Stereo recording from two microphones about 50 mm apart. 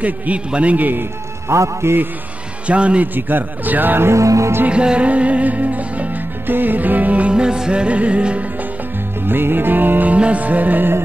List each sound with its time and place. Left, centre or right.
0.5 s speech: right
1.5 s music: right
2.6 s speech: right
3.2 s speech: right
4.1 s music: right
4.6 s music: right
6.4 s music: right
9.2 s music: right
10.1 s speech: right